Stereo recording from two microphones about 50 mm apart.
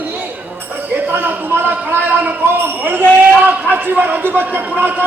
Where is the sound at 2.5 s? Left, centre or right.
Right.